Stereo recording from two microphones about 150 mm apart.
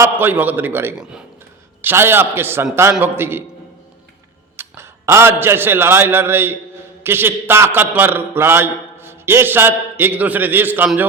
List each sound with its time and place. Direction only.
0.0 s a man's voice: 15° right (ahead or behind)
4.5 s a man's voice: 15° right (ahead or behind)